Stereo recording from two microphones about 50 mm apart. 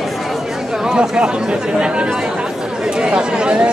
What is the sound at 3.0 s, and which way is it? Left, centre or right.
Speech, centre.